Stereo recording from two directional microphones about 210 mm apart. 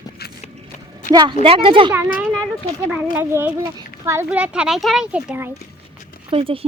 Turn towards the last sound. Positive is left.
turn(degrees=-25)  # may be behind; listen again after turning